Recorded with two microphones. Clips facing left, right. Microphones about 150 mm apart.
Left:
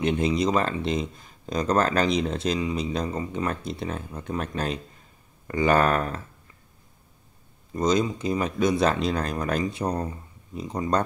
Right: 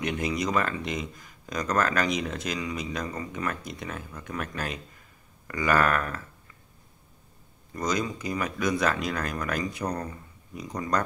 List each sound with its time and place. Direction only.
0.0 s speech: 25° left (ahead or behind)
7.7 s speech: 25° left (ahead or behind)